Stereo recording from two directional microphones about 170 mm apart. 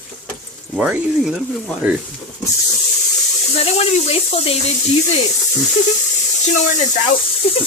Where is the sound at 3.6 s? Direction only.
40° left (ahead or behind).